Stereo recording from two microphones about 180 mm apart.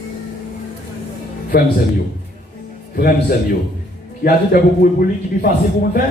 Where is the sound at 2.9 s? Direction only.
60° left (ahead or behind).